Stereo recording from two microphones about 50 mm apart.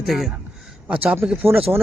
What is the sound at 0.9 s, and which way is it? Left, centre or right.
Speech, right.